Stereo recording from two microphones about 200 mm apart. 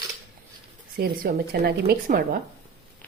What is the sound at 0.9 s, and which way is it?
A woman's voice, 50° right (ahead or behind).